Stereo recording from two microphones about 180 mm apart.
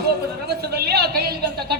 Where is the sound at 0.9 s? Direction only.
60° right (ahead or behind).